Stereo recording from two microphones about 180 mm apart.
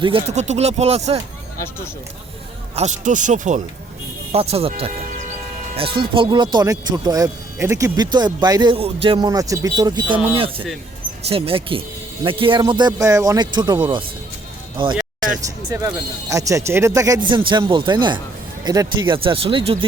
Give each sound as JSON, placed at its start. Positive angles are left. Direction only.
{"t": 0.0, "sound": "speech", "side_deg": -35}
{"t": 2.7, "sound": "speech", "side_deg": -40}
{"t": 4.3, "sound": "speech", "side_deg": -35}
{"t": 6.0, "sound": "speech", "side_deg": -25}
{"t": 11.3, "sound": "a man's voice", "side_deg": -30}